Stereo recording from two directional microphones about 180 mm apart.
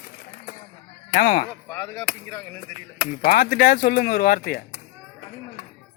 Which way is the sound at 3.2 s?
55° left (ahead or behind).